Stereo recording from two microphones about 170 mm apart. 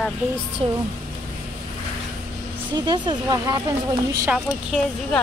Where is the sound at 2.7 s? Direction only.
25° right (ahead or behind).